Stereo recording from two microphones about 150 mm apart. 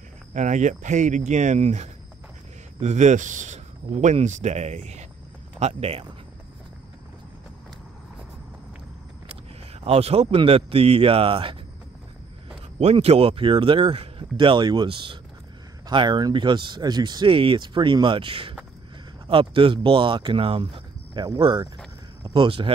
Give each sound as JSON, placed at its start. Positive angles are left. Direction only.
{"t": 0.3, "sound": "speech", "side_deg": -55}
{"t": 9.8, "sound": "speech", "side_deg": -40}
{"t": 12.7, "sound": "speech", "side_deg": -40}